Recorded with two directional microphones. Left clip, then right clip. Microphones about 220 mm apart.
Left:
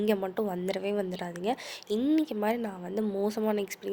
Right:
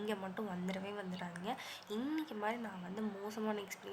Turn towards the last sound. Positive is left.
turn(degrees=30)  # may be behind; listen again after turning